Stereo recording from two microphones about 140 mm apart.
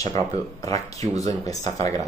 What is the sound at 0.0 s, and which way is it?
Speech, 50° right (ahead or behind).